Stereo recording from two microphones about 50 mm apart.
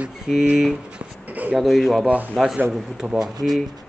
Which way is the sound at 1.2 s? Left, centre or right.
Right.